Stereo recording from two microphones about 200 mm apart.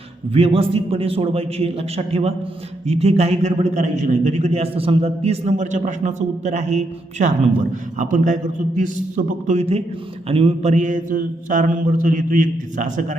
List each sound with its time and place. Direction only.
0.3 s a man's voice: 30° right (ahead or behind)